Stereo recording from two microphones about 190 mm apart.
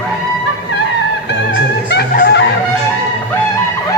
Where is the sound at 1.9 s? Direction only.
55° left (ahead or behind).